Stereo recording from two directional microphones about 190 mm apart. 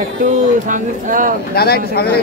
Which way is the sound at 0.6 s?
45° right (ahead or behind).